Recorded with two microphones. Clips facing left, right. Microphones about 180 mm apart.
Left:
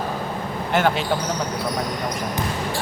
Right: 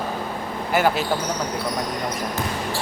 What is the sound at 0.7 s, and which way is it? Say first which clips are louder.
Speech: even; 5° right (ahead or behind).